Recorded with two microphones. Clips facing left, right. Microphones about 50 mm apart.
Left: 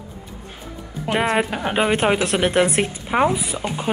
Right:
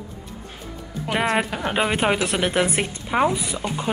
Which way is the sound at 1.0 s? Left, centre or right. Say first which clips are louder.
Left 2 dB; centre.